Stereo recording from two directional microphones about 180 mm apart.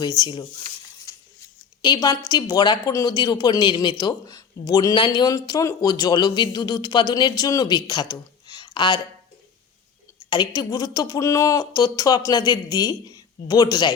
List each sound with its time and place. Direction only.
0.0 s speech: 25° left (ahead or behind)
7.9 s a sound: 25° left (ahead or behind)
10.2 s speech: 25° left (ahead or behind)